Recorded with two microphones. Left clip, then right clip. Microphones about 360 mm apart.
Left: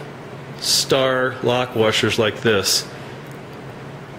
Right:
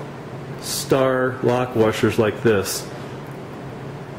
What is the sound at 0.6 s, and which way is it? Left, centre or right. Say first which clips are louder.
Speech: left 2 dB; centre.